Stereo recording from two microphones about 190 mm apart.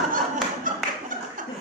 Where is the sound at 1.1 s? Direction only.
45° right (ahead or behind).